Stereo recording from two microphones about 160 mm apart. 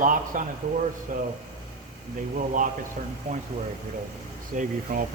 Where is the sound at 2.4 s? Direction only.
55° right (ahead or behind).